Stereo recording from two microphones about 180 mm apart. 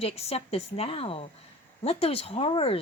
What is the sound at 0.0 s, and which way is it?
A woman's voice, 35° left (ahead or behind).